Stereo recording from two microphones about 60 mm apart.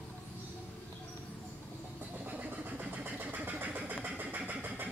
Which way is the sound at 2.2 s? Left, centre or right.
Right.